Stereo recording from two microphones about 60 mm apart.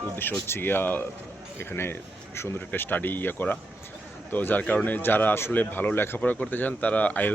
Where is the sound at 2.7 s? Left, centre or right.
Left.